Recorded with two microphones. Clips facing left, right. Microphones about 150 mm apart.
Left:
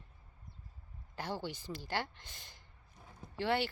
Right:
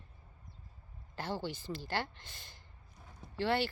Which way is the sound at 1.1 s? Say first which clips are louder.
Right 2 dB; 15° left (ahead or behind).